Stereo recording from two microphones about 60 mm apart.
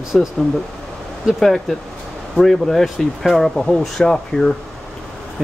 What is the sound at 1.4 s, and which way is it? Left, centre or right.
Speech, centre.